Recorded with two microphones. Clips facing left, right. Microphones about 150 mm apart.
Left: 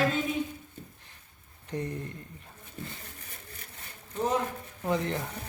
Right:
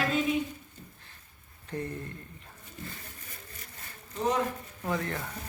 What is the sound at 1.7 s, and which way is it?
Speech, 20° left (ahead or behind).